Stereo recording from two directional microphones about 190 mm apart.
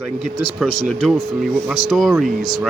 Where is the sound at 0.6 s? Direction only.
Centre (ahead or behind).